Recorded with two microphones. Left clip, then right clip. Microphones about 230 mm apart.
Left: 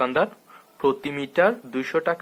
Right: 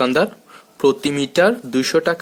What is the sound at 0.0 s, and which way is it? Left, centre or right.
Speech, right.